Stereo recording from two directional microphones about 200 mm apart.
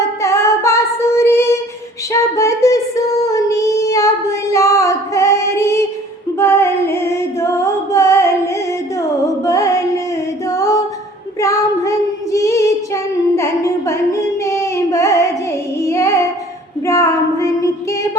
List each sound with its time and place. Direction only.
0.2 s female singing: 15° left (ahead or behind)
6.4 s music: 10° left (ahead or behind)
10.5 s singing: 15° left (ahead or behind)
11.3 s female singing: 15° left (ahead or behind)
15.8 s child singing: 15° left (ahead or behind)